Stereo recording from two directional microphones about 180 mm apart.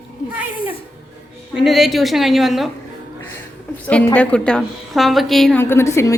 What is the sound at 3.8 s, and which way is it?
A woman's voice, 10° left (ahead or behind).